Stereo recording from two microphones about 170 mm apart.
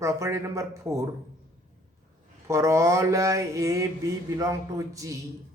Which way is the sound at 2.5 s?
15° right (ahead or behind).